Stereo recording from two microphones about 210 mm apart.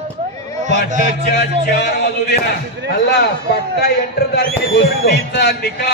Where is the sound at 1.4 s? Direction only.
50° left (ahead or behind).